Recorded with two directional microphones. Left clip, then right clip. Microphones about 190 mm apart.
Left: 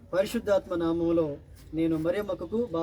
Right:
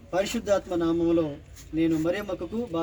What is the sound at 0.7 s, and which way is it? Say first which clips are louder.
Speech: right 2 dB; 15° left (ahead or behind).